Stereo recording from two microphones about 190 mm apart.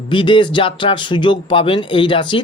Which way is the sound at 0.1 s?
25° left (ahead or behind).